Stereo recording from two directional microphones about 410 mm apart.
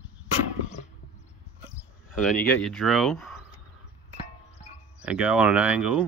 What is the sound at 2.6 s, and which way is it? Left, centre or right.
Speech, centre.